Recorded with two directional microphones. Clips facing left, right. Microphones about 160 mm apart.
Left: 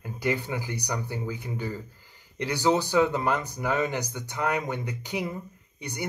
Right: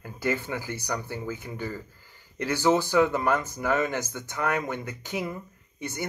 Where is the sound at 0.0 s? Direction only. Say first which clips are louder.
Even; 15° left (ahead or behind).